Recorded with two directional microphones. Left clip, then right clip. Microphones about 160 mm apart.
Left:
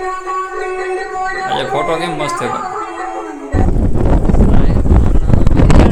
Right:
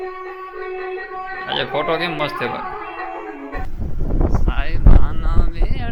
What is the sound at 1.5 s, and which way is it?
Speech, 10° left (ahead or behind).